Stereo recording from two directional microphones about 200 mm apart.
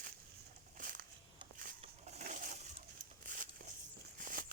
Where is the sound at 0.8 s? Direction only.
45° right (ahead or behind).